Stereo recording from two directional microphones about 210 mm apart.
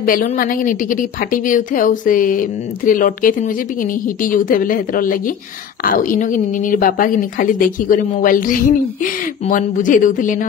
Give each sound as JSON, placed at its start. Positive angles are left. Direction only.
{"t": 0.0, "sound": "a woman's voice", "side_deg": 40}